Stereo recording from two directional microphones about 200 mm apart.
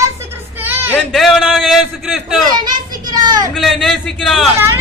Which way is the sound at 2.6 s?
20° right (ahead or behind).